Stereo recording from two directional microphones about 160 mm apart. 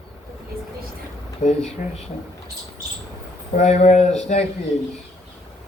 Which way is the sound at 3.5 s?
45° left (ahead or behind).